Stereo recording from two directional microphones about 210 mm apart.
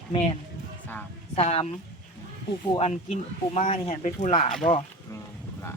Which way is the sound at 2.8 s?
30° left (ahead or behind).